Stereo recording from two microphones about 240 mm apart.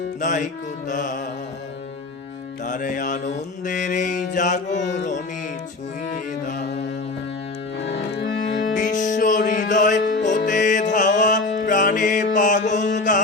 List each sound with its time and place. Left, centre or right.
0.2 s mantra: left
2.6 s mantra: left
4.8 s music: left
6.1 s mantra: left
7.8 s music: left
8.7 s music: left
10.0 s music: left
10.4 s music: left